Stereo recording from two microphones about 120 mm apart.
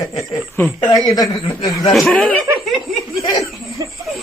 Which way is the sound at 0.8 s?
30° left (ahead or behind).